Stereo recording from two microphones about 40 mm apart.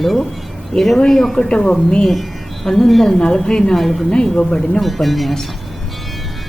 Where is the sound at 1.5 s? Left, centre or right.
Left.